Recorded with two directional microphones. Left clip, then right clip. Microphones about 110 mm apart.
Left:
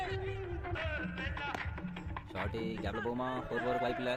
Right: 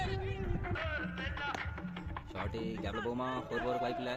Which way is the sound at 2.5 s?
Centre (ahead or behind).